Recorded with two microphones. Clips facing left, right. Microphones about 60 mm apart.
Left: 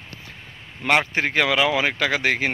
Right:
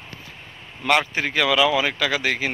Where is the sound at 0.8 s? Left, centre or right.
Left.